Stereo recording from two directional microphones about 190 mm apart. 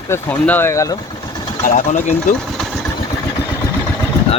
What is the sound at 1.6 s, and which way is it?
Speech, 45° left (ahead or behind).